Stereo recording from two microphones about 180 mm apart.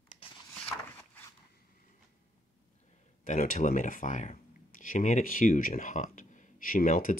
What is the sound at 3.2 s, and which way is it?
Speech, 45° left (ahead or behind).